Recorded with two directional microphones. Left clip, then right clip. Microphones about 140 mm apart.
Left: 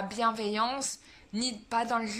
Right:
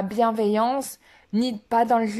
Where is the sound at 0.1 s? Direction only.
50° right (ahead or behind).